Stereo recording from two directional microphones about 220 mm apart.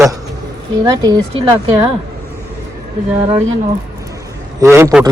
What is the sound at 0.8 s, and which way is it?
A man's voice, 15° right (ahead or behind).